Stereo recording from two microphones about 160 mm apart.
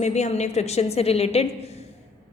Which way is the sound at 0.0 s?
45° left (ahead or behind).